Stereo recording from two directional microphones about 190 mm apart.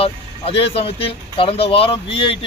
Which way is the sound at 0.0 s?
30° left (ahead or behind).